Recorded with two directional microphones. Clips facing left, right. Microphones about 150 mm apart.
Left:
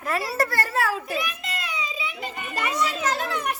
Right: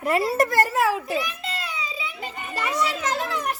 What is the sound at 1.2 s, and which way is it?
Children playing, 30° right (ahead or behind).